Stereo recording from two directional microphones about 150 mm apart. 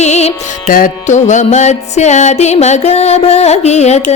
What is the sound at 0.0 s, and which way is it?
Music, 45° left (ahead or behind).